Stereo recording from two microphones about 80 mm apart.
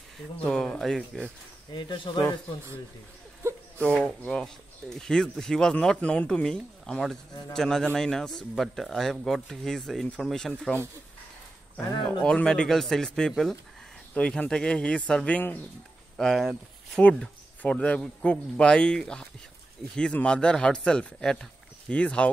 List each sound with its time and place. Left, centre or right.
0.5 s speech: centre
1.7 s speech: left
3.4 s a sound: right
4.3 s speech: centre
12.2 s speech: centre
16.2 s speech: centre
17.6 s speech: centre